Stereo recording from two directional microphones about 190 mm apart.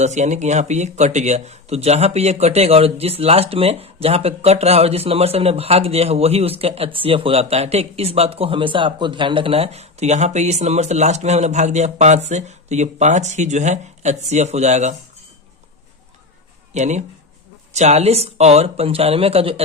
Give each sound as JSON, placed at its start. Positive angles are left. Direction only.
{"t": 0.0, "sound": "a man's voice", "side_deg": -35}
{"t": 16.7, "sound": "a man's voice", "side_deg": -35}